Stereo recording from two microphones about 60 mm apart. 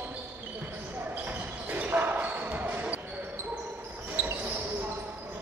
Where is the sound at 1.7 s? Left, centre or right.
Right.